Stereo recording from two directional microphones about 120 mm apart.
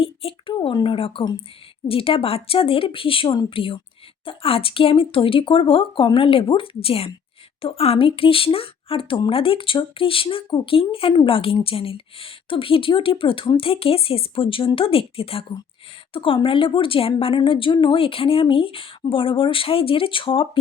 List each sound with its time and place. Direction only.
0.0 s a woman's voice: 50° left (ahead or behind)